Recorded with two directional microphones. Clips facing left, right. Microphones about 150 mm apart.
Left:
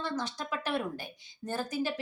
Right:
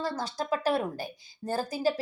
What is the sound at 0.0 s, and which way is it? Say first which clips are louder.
A woman's voice: right 3 dB; 35° right (ahead or behind).